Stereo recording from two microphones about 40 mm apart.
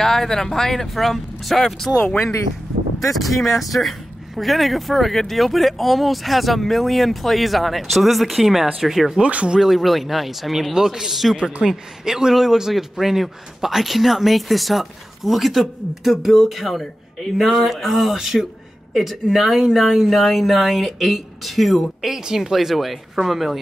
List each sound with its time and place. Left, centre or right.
0.0 s speech: centre
3.0 s speech: centre
9.3 s speech: right
9.6 s speech: centre